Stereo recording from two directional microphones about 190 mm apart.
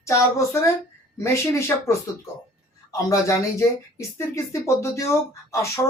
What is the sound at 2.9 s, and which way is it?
Speech, 15° left (ahead or behind).